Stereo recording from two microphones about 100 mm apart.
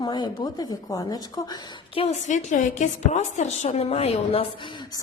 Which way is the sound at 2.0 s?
70° left (ahead or behind).